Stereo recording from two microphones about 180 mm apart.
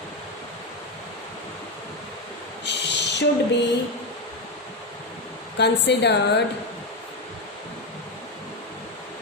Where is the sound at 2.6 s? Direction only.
75° left (ahead or behind).